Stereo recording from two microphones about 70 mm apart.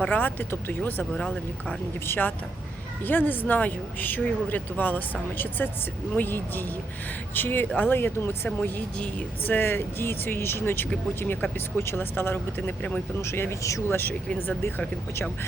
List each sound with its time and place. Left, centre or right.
0.0 s speech: left
1.1 s speech: centre
2.0 s speech: left
13.2 s speech: left
13.6 s speech: left
13.8 s speech: left